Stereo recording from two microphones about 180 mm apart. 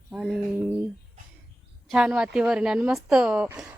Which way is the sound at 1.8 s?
5° right (ahead or behind).